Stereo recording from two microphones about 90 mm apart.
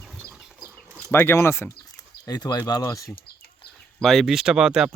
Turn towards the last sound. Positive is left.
turn(degrees=-10)  # may be behind; listen again after turning